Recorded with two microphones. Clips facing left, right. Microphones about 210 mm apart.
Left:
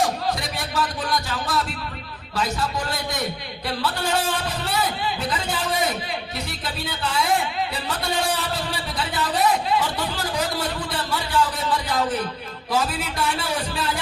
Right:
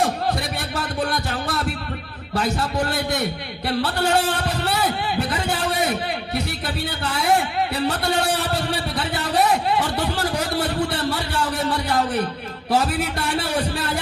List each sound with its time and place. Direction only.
0.8 s music: 60° right (ahead or behind)
2.3 s speech: 60° right (ahead or behind)
3.7 s a sound: 60° right (ahead or behind)
6.8 s speech: 60° right (ahead or behind)